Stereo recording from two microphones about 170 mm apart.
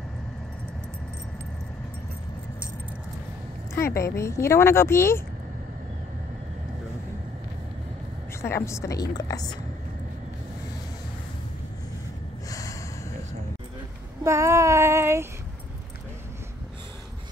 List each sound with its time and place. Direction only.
3.7 s speech: 15° left (ahead or behind)
8.4 s speech: 15° left (ahead or behind)
12.4 s snort: 20° left (ahead or behind)
14.2 s child singing: 15° right (ahead or behind)